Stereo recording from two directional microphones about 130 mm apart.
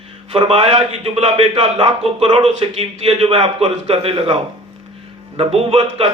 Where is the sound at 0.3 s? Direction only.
50° right (ahead or behind).